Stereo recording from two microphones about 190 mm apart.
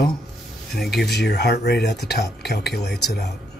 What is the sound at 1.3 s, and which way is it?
Speech, 60° left (ahead or behind).